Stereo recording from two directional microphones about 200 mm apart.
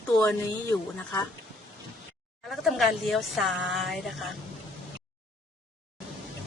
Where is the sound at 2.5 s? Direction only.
Centre (ahead or behind).